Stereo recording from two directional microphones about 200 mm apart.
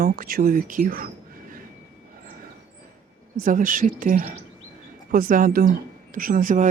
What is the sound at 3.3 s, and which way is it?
Speech, 40° right (ahead or behind).